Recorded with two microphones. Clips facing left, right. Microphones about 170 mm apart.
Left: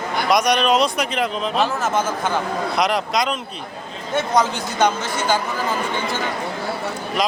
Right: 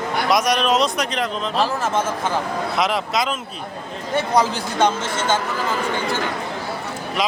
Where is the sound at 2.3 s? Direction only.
Centre (ahead or behind).